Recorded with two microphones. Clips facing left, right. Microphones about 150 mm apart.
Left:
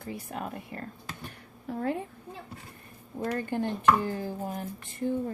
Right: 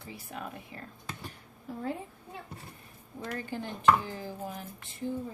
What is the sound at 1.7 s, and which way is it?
Speech, 70° left (ahead or behind).